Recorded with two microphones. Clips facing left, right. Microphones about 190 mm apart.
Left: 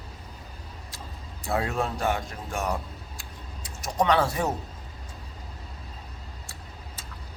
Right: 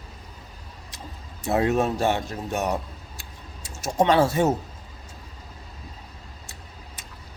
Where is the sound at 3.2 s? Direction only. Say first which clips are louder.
Left 1 dB; 25° right (ahead or behind).